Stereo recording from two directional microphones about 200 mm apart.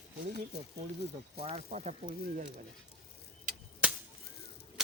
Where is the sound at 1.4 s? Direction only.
30° right (ahead or behind).